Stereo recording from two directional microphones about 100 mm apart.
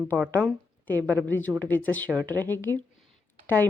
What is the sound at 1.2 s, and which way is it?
A woman's voice, 20° left (ahead or behind).